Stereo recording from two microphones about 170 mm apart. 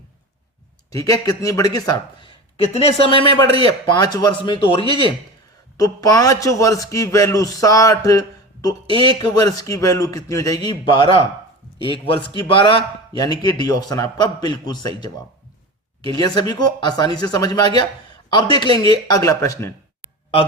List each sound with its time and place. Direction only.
0.9 s a man's voice: 20° left (ahead or behind)
2.7 s a man's voice: 35° left (ahead or behind)